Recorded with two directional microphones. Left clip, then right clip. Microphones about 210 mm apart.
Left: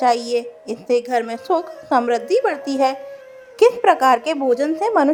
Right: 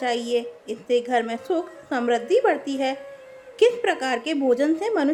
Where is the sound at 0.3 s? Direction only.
25° left (ahead or behind).